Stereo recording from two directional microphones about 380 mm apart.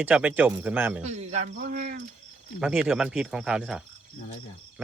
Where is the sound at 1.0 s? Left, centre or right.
Centre.